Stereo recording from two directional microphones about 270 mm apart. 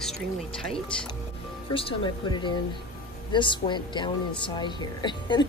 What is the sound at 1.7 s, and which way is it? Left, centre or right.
Speech, centre.